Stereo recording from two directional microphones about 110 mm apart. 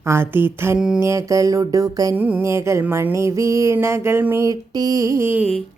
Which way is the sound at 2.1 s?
15° right (ahead or behind).